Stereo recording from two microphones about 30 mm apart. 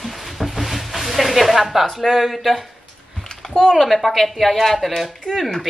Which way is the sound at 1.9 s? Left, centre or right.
Centre.